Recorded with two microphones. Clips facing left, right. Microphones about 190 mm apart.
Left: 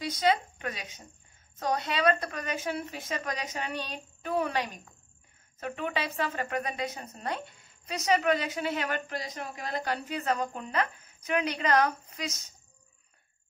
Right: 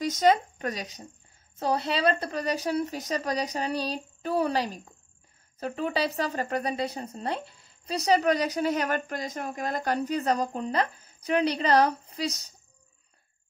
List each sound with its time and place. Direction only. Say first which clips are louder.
0.0 s a woman's voice: right 5 dB; 45° right (ahead or behind)